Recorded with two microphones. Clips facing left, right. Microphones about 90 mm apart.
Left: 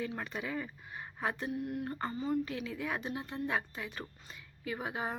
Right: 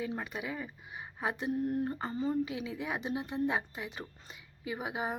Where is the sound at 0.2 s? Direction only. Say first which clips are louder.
Even; 10° right (ahead or behind).